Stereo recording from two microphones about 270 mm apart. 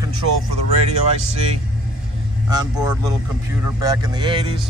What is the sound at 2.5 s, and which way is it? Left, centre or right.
Speech, centre.